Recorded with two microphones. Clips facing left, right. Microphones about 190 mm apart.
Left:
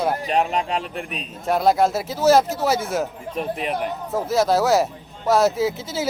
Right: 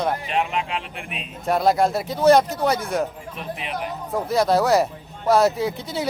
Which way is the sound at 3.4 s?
45° left (ahead or behind).